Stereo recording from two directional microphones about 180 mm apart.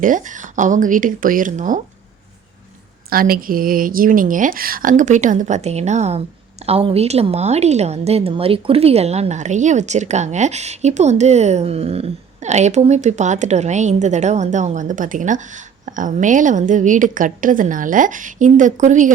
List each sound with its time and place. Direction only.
0.0 s a woman's voice: 45° right (ahead or behind)
3.1 s a woman's voice: 55° right (ahead or behind)